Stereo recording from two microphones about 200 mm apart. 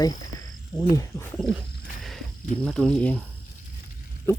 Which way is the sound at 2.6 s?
5° left (ahead or behind).